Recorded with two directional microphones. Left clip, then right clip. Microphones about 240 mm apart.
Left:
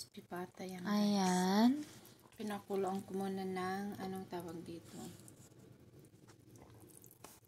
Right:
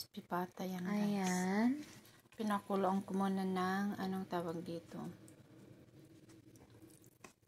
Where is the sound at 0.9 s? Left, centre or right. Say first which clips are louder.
Left 5 dB; left.